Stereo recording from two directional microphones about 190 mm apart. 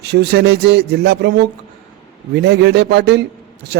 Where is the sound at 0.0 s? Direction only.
60° right (ahead or behind).